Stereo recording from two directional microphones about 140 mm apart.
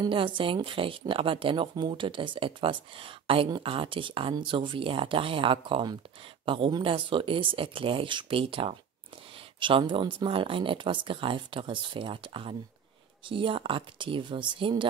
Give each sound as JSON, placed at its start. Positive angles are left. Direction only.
{"t": 0.0, "sound": "speech", "side_deg": -35}